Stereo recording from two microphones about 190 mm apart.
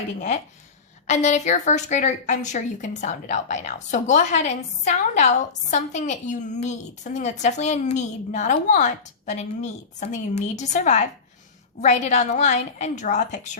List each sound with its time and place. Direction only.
1.0 s a woman's voice: 40° left (ahead or behind)